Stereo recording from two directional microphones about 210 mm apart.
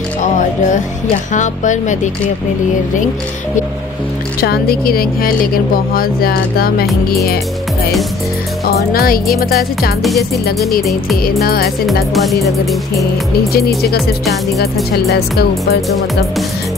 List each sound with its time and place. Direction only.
0.2 s speech: 35° left (ahead or behind)
4.4 s speech: 45° left (ahead or behind)
8.6 s speech: 45° left (ahead or behind)
10.8 s music: centre (ahead or behind)
11.4 s speech: 45° left (ahead or behind)
11.8 s music: centre (ahead or behind)
13.5 s speech: 50° left (ahead or behind)
15.1 s speech: 50° left (ahead or behind)